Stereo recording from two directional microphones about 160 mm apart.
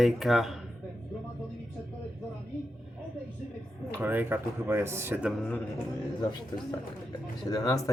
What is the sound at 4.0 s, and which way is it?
Speech, 10° right (ahead or behind).